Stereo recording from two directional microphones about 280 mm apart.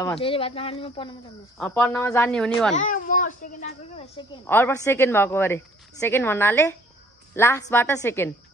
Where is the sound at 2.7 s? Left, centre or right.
Left.